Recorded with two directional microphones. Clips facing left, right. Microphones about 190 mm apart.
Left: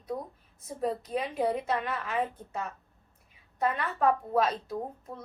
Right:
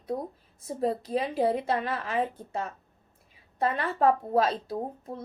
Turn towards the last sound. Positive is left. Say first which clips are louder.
# right 3 dB
turn(degrees=-30)  # may be behind; listen again after turning